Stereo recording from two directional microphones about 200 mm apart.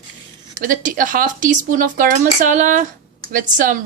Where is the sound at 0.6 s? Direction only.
40° right (ahead or behind).